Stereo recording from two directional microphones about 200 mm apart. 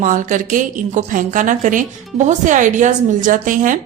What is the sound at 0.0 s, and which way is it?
A woman's voice, 40° right (ahead or behind).